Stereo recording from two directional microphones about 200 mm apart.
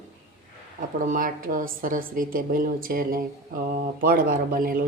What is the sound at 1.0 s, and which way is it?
A woman's voice, 45° right (ahead or behind).